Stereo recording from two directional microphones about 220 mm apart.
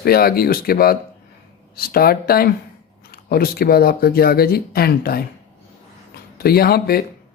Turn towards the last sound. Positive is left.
turn(degrees=45)  # may be behind; listen again after turning